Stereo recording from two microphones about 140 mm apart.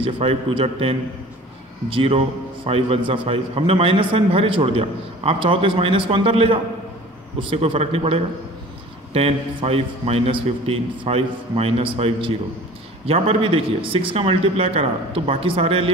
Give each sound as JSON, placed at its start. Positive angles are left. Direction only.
{"t": 0.0, "sound": "a man's voice", "side_deg": -40}